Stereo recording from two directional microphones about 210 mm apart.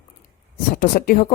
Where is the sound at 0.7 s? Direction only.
45° left (ahead or behind).